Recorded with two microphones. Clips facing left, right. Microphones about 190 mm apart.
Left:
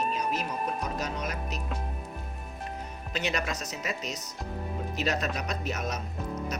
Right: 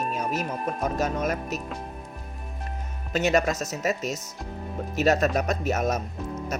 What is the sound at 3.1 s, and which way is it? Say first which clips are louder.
Speech: right 9 dB; 45° right (ahead or behind).